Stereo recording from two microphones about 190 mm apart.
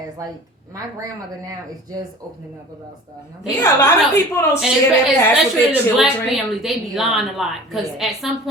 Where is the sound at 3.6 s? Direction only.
15° left (ahead or behind).